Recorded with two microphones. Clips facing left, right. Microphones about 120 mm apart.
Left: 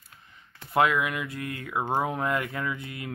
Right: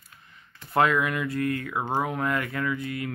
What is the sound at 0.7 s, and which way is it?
Speech, 10° left (ahead or behind).